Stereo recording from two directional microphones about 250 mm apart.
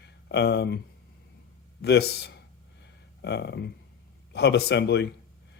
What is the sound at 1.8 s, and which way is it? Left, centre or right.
Speech, left.